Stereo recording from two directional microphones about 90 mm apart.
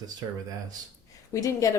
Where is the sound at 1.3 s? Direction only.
40° left (ahead or behind).